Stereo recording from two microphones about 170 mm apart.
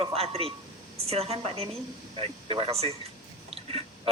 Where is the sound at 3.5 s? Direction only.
35° right (ahead or behind).